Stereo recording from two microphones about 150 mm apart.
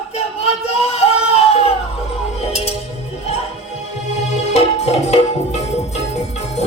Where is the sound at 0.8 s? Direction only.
45° left (ahead or behind).